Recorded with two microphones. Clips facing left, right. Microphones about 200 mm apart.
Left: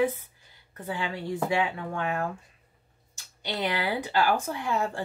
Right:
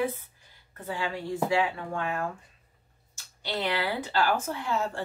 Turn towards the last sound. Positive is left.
turn(degrees=15)  # may be behind; listen again after turning